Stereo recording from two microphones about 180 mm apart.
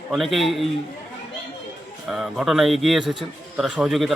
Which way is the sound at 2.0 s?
Centre (ahead or behind).